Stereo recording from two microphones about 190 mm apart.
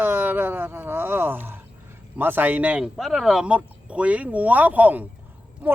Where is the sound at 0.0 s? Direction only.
10° right (ahead or behind).